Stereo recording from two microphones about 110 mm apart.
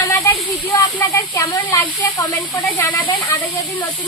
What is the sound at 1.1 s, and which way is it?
Speech, 30° left (ahead or behind).